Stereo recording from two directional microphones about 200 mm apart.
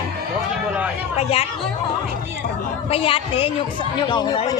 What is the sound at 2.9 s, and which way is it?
A woman's voice, 30° left (ahead or behind).